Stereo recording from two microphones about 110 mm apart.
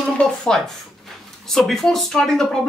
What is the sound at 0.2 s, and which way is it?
Speech, 5° left (ahead or behind).